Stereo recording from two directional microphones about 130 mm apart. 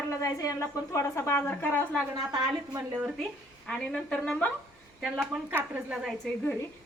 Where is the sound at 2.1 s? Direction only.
30° right (ahead or behind).